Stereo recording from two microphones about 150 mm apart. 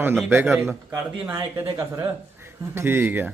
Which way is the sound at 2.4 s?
15° right (ahead or behind).